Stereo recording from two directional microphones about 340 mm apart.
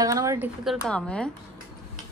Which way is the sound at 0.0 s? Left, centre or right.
Centre.